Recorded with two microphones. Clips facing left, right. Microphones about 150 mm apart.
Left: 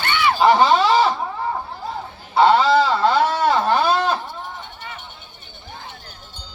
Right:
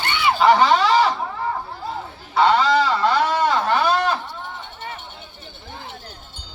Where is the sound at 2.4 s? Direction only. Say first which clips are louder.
Left 2 dB; 5° left (ahead or behind).